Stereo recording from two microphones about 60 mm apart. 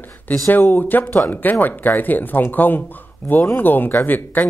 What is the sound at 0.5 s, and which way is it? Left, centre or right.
Speech, left.